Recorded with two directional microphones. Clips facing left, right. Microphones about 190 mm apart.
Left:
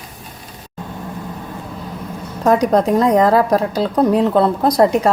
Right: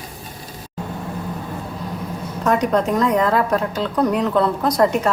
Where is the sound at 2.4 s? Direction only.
35° left (ahead or behind).